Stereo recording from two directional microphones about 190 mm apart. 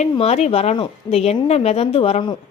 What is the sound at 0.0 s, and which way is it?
A woman's voice, 35° left (ahead or behind).